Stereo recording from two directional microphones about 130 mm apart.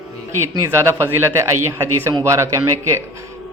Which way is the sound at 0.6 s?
20° right (ahead or behind).